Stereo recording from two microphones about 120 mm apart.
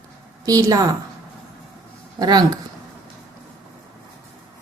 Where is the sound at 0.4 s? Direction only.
30° right (ahead or behind).